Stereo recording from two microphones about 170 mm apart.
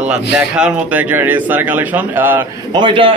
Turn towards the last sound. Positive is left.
turn(degrees=-30)  # may be behind; listen again after turning